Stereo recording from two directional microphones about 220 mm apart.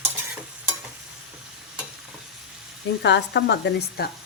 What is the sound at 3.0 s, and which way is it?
Speech, 50° left (ahead or behind).